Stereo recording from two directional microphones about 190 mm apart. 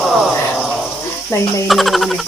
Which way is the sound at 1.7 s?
Centre (ahead or behind).